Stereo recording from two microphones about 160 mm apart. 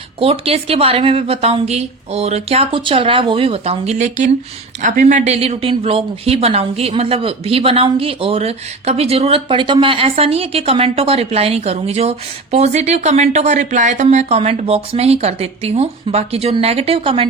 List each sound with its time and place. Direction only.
0.2 s speech: 40° right (ahead or behind)